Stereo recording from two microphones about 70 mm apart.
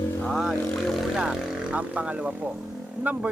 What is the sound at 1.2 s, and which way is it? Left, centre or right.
Speech, centre.